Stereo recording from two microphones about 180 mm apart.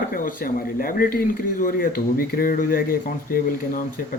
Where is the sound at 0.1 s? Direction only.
50° left (ahead or behind).